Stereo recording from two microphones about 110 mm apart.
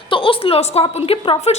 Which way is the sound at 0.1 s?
55° left (ahead or behind).